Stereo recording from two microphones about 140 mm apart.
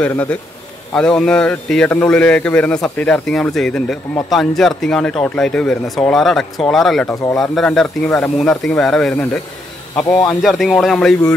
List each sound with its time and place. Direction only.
0.1 s a man's voice: 10° left (ahead or behind)
7.1 s speech: 20° left (ahead or behind)
7.3 s a man's voice: centre (ahead or behind)
9.9 s speech: 25° left (ahead or behind)
10.2 s a man's voice: centre (ahead or behind)